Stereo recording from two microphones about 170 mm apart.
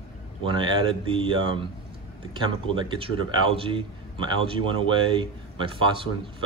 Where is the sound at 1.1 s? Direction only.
30° right (ahead or behind).